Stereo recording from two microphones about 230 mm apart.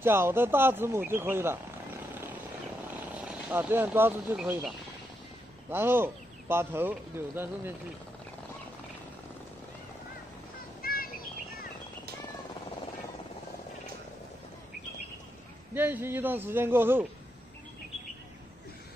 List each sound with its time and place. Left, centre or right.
0.0 s speech: centre
2.9 s speech: centre
10.8 s bird: left
15.7 s speech: centre